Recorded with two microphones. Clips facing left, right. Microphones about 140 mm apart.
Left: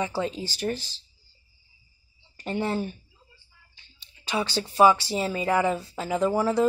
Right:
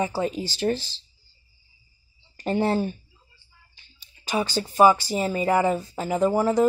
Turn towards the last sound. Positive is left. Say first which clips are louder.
# right 2 dB
turn(degrees=-10)  # may be behind; listen again after turning